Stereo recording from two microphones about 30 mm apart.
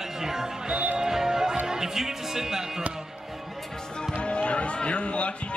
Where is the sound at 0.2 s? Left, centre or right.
Centre.